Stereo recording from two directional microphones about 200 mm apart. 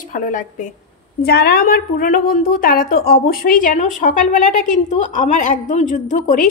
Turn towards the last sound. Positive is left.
turn(degrees=40)  # may be behind; listen again after turning